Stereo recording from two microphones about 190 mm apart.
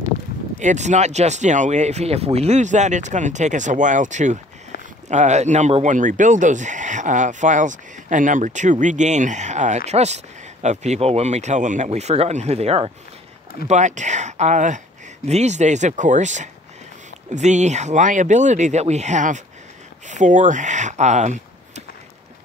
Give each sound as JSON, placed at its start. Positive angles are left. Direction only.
{"t": 0.6, "sound": "speech", "side_deg": -40}